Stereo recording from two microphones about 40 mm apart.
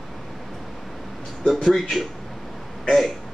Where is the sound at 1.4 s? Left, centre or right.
Centre.